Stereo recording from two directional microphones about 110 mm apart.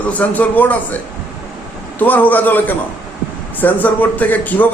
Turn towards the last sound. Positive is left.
turn(degrees=15)  # may be behind; listen again after turning